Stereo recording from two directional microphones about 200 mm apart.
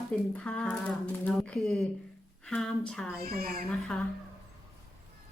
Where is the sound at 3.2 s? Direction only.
50° right (ahead or behind).